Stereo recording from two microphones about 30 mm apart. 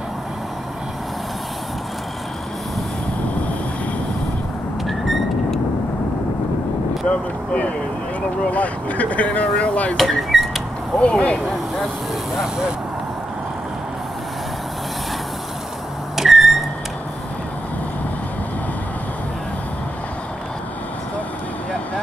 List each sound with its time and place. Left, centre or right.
4.8 s vehicle: centre
7.1 s speech: left
9.9 s a sound: centre
11.0 s speech: left
16.2 s vehicle: centre